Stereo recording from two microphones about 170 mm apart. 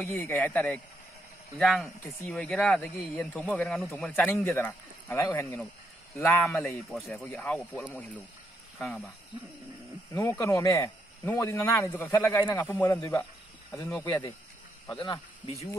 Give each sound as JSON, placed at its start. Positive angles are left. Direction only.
{"t": 0.0, "sound": "speech", "side_deg": 5}
{"t": 6.9, "sound": "speech", "side_deg": 0}
{"t": 7.8, "sound": "speech", "side_deg": -5}
{"t": 10.1, "sound": "speech", "side_deg": 15}